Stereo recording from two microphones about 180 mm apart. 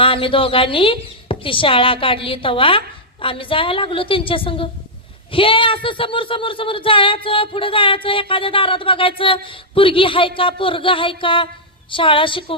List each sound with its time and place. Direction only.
0.0 s speech: 30° left (ahead or behind)